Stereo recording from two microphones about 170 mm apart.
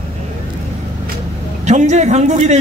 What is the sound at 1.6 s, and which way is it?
Speech, 45° right (ahead or behind).